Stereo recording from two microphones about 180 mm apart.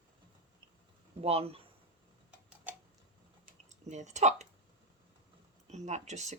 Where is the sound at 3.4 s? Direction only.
40° right (ahead or behind).